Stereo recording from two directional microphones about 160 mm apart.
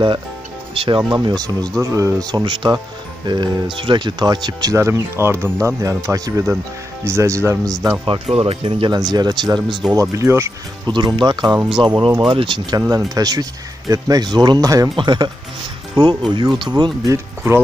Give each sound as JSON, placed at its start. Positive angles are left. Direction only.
{"t": 0.7, "sound": "speech", "side_deg": -30}
{"t": 8.0, "sound": "speech", "side_deg": -35}
{"t": 9.6, "sound": "speech", "side_deg": 0}
{"t": 9.9, "sound": "speech", "side_deg": -20}
{"t": 10.9, "sound": "speech", "side_deg": -30}